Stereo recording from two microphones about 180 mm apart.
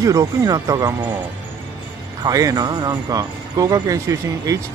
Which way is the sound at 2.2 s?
20° right (ahead or behind).